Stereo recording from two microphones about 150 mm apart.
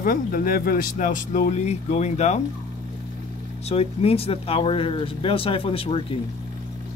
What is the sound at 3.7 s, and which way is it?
Speech, 40° left (ahead or behind).